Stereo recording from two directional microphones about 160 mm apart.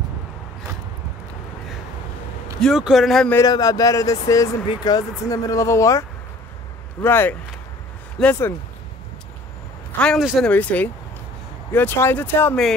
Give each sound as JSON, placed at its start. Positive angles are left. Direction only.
{"t": 2.6, "sound": "speech", "side_deg": 0}
{"t": 3.3, "sound": "speech", "side_deg": 20}
{"t": 9.9, "sound": "speech", "side_deg": 5}
{"t": 10.5, "sound": "speech", "side_deg": 10}